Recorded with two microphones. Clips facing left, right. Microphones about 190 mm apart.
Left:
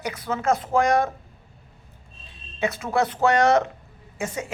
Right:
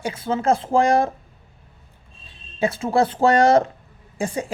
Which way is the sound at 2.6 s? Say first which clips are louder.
Right 4 dB; 30° right (ahead or behind).